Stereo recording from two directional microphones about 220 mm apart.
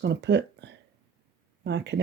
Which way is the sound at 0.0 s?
50° right (ahead or behind).